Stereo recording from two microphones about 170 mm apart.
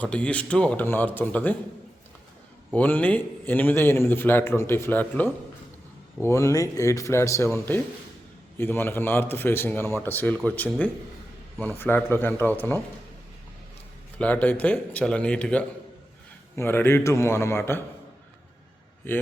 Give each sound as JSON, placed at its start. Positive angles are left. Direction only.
{"t": 0.0, "sound": "a man's voice", "side_deg": 5}
{"t": 2.7, "sound": "a man's voice", "side_deg": 10}
{"t": 14.2, "sound": "a man's voice", "side_deg": 10}